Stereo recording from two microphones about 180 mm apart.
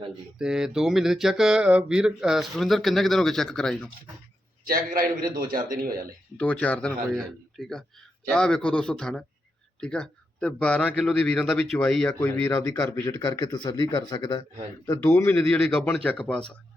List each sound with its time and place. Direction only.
0.3 s speech: 5° right (ahead or behind)
4.6 s a man's voice: 55° right (ahead or behind)
6.3 s speech: 5° left (ahead or behind)
12.2 s speech: 15° left (ahead or behind)
14.8 s speech: 15° left (ahead or behind)